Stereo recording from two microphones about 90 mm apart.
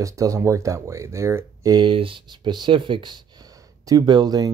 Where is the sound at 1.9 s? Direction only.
75° right (ahead or behind).